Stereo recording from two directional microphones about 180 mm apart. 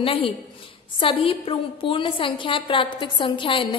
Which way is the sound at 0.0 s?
30° left (ahead or behind).